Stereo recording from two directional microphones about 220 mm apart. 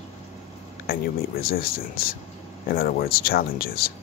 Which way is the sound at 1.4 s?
40° left (ahead or behind).